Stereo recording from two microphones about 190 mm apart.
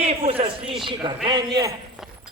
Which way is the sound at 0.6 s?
Centre (ahead or behind).